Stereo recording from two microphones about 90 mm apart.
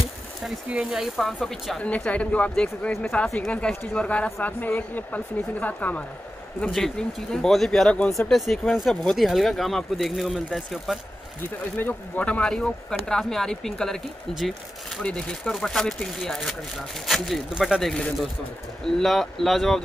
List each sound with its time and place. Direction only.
0.7 s speech: 10° right (ahead or behind)
1.8 s speech: 15° left (ahead or behind)
6.7 s speech: 5° left (ahead or behind)
11.7 s speech: 15° left (ahead or behind)